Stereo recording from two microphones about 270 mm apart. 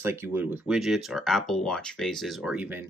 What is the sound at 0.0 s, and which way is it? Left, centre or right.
Speech, centre.